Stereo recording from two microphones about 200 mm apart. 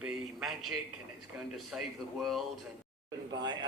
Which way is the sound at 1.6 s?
Centre (ahead or behind).